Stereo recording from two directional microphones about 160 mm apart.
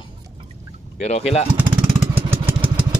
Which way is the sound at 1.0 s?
45° left (ahead or behind).